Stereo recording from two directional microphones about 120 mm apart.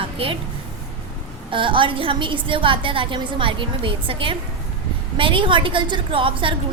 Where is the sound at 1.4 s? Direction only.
45° right (ahead or behind).